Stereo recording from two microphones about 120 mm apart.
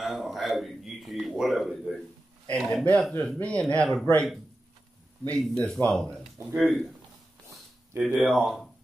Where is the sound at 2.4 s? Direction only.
10° left (ahead or behind).